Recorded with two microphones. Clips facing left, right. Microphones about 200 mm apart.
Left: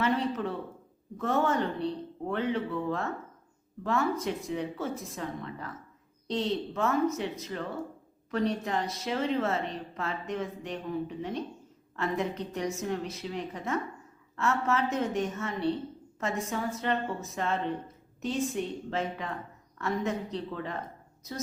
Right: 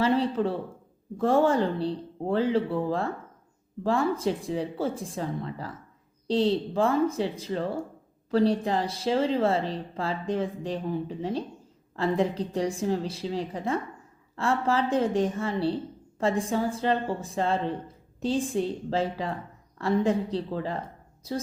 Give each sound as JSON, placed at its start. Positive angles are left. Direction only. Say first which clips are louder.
{"t": 0.0, "sound": "speech", "louder": "right 5 dB", "side_deg": -30}